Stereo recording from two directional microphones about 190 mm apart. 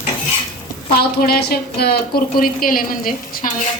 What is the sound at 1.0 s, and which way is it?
A woman's voice, 55° left (ahead or behind).